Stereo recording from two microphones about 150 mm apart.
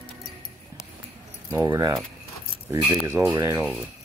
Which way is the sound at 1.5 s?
20° right (ahead or behind).